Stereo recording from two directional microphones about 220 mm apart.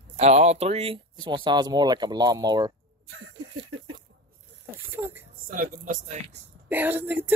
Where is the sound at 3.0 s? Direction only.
75° right (ahead or behind).